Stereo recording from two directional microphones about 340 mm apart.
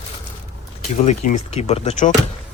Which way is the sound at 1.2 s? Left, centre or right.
Centre.